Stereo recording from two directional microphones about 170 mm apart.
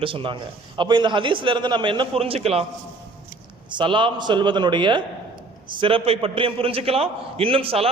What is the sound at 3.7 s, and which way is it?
A man's voice, 30° right (ahead or behind).